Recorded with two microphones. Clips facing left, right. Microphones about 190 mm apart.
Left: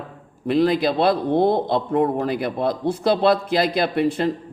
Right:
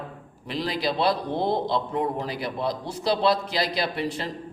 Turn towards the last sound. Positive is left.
turn(degrees=55)  # may be behind; listen again after turning